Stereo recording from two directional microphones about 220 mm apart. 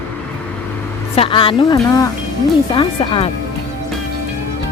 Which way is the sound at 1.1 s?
25° left (ahead or behind).